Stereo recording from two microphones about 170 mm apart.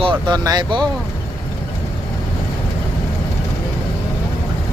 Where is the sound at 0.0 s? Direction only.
30° right (ahead or behind).